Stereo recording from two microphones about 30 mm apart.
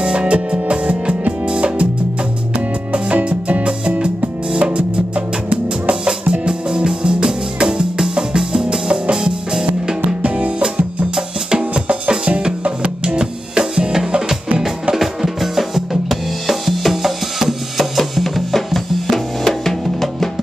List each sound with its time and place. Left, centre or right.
0.0 s music: right
3.3 s music: right
9.1 s music: right
10.2 s music: right
12.1 s music: right
15.0 s drum: centre